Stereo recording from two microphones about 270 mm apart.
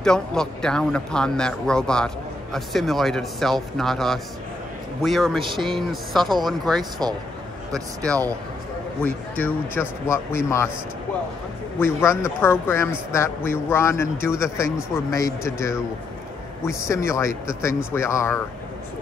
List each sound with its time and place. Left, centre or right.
0.0 s speech: centre
5.4 s speech: centre
5.8 s speech: centre
6.8 s speech: centre
9.0 s speech: centre
11.8 s speech: centre